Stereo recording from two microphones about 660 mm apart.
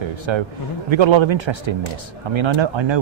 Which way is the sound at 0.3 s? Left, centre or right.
Right.